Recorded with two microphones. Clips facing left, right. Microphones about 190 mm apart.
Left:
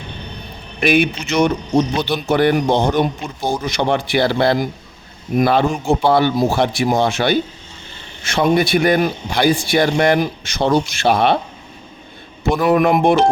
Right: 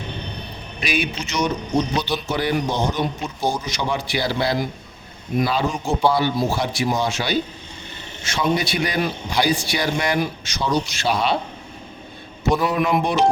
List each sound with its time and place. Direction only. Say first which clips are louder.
0.8 s speech: left 9 dB; 55° left (ahead or behind)
12.5 s speech: left 7 dB; 50° left (ahead or behind)